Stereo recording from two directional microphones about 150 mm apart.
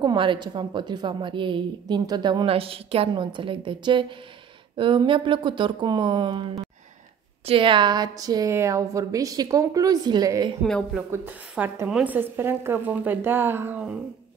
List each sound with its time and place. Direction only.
0.0 s a woman's voice: 30° right (ahead or behind)
10.6 s speech: 5° left (ahead or behind)
11.0 s a woman's voice: 10° right (ahead or behind)